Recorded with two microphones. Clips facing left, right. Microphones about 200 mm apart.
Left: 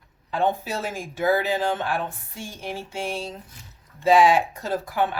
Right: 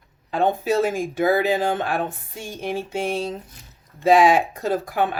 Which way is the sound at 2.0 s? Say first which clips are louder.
Right 3 dB; 20° right (ahead or behind).